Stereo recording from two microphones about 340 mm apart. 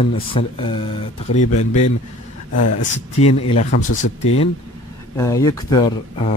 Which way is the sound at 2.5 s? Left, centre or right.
Left.